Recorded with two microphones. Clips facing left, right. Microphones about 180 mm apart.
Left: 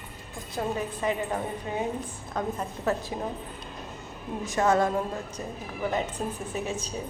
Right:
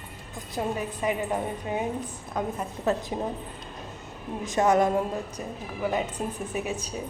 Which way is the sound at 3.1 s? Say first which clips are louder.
Right 2 dB; 25° right (ahead or behind).